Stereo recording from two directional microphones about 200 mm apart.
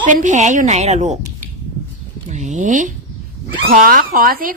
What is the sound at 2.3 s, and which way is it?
A woman's voice, 35° right (ahead or behind).